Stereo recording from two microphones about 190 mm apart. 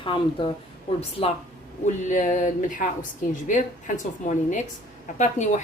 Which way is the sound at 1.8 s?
40° left (ahead or behind).